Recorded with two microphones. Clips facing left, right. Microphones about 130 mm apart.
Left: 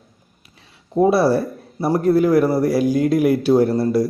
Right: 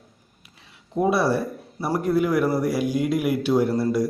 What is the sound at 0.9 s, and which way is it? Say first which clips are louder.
A man's voice: left 6 dB; 35° left (ahead or behind).